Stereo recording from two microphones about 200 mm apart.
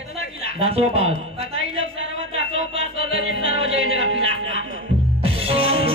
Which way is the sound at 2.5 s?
30° right (ahead or behind).